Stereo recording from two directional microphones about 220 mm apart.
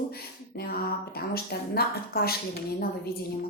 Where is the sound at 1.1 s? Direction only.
45° left (ahead or behind).